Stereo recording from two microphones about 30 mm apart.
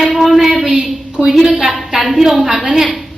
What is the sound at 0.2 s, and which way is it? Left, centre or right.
Child singing, centre.